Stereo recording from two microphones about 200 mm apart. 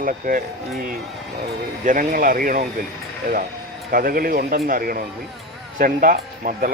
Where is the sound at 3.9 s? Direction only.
45° right (ahead or behind).